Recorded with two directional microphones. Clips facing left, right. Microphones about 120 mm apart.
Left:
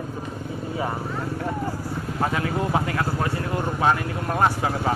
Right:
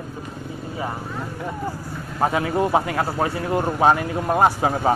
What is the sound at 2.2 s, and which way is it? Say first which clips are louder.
Speech: right 5 dB; 20° right (ahead or behind).